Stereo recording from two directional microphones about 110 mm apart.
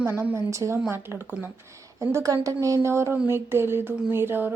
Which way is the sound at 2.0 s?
30° right (ahead or behind).